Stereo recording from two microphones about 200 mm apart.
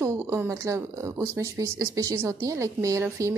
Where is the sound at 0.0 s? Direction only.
15° right (ahead or behind).